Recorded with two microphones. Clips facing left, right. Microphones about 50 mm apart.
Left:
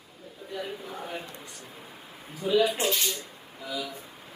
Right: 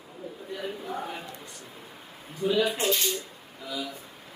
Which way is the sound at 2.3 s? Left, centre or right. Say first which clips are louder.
Left 1 dB; centre.